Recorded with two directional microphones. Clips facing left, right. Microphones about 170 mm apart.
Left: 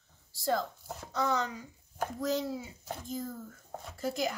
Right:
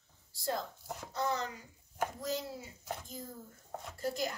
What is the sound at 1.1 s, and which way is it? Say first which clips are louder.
Speech: left 4 dB; 90° left.